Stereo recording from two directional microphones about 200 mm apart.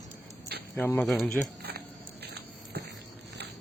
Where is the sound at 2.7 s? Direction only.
50° right (ahead or behind).